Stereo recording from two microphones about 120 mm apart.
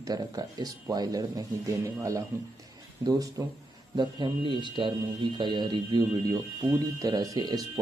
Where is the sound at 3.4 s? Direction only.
30° right (ahead or behind).